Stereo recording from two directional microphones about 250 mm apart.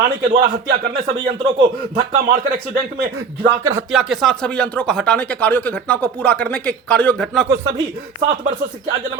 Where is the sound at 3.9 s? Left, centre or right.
Centre.